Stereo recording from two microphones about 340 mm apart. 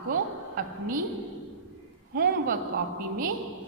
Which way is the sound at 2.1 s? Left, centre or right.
Right.